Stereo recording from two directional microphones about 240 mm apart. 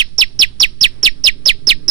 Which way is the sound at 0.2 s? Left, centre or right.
Centre.